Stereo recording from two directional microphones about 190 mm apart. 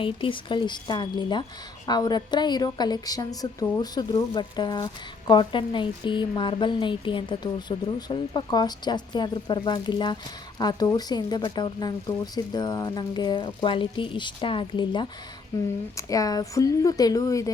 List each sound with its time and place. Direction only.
0.0 s a woman's voice: 25° left (ahead or behind)